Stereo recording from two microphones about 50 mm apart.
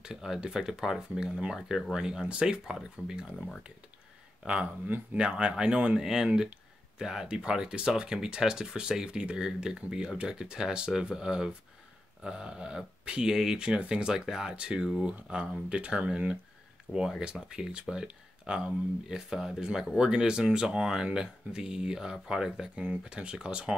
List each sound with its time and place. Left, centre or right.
0.0 s speech: centre
4.4 s speech: right
5.9 s speech: centre
16.9 s speech: left
17.2 s speech: centre